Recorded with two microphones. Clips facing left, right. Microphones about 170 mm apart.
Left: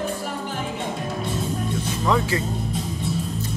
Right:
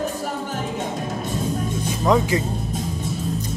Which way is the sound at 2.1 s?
15° right (ahead or behind).